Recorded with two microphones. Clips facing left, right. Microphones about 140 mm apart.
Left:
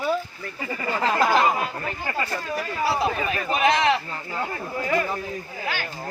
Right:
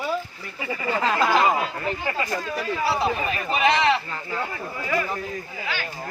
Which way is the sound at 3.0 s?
Centre (ahead or behind).